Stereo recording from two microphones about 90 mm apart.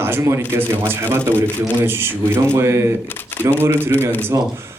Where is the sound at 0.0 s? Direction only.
30° right (ahead or behind).